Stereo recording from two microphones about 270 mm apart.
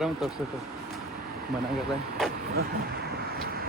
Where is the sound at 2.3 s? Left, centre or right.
Right.